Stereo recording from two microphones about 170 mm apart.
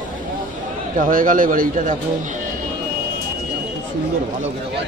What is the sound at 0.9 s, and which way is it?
A man's voice, 55° right (ahead or behind).